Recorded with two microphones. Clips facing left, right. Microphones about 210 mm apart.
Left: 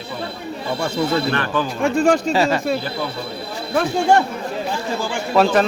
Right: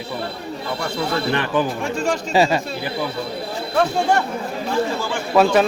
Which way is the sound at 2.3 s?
15° right (ahead or behind).